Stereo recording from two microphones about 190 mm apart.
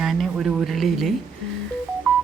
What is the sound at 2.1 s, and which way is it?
Music, centre (ahead or behind).